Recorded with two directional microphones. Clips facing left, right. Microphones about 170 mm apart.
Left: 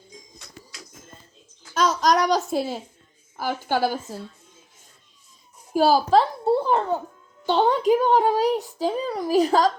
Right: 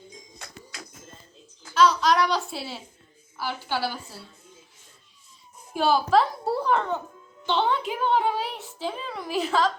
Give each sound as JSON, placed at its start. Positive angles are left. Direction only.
{"t": 0.3, "sound": "music", "side_deg": -60}
{"t": 1.7, "sound": "a child's voice", "side_deg": 40}
{"t": 5.7, "sound": "a woman's voice", "side_deg": 35}